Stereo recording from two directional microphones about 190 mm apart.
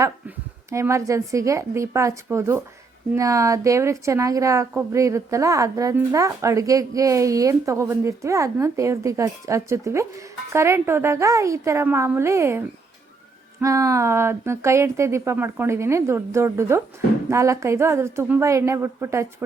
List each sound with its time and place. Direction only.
0.7 s a woman's voice: 15° right (ahead or behind)